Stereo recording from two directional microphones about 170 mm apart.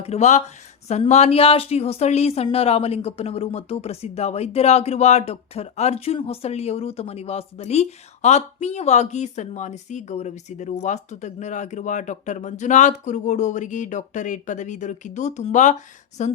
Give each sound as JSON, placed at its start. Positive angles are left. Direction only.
{"t": 0.0, "sound": "speech", "side_deg": 40}